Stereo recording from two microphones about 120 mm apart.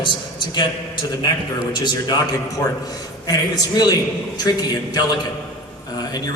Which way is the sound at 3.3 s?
30° left (ahead or behind).